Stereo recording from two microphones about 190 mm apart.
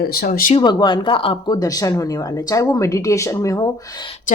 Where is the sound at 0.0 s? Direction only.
50° left (ahead or behind).